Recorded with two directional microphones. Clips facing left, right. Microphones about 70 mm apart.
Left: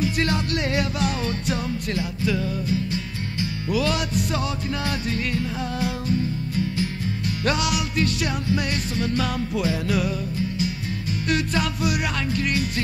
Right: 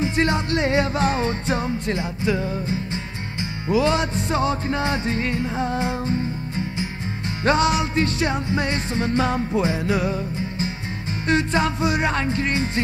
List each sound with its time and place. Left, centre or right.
0.0 s music: right